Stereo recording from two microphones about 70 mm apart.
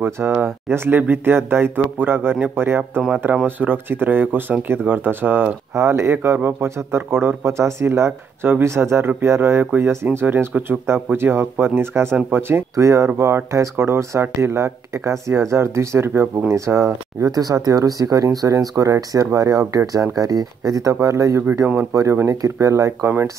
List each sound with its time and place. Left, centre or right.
0.4 s speech: right
5.8 s speech: right
12.7 s speech: right
17.3 s speech: right
21.9 s speech: right